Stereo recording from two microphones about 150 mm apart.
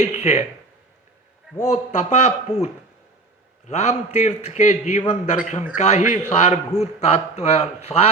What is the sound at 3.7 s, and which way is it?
A man's voice, 50° left (ahead or behind).